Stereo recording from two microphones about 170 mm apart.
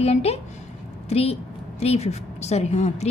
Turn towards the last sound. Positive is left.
turn(degrees=40)  # may be behind; listen again after turning